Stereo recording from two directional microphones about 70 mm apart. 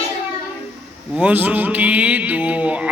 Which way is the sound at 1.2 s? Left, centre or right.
Right.